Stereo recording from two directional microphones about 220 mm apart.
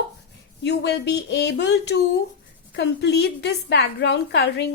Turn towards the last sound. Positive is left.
turn(degrees=50)  # may be behind; listen again after turning